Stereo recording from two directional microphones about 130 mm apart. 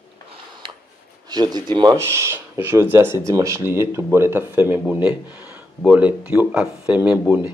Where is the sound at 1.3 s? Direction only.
30° right (ahead or behind).